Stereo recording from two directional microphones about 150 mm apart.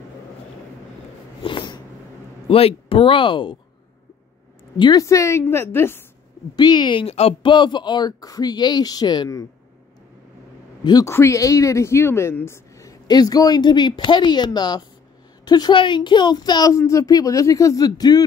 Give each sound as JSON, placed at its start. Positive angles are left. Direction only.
{"t": 1.4, "sound": "dog", "side_deg": 30}
{"t": 2.4, "sound": "speech", "side_deg": 40}
{"t": 4.7, "sound": "speech", "side_deg": 30}
{"t": 5.0, "sound": "a woman's voice", "side_deg": 20}
{"t": 6.5, "sound": "speech", "side_deg": 30}
{"t": 10.8, "sound": "speech", "side_deg": 25}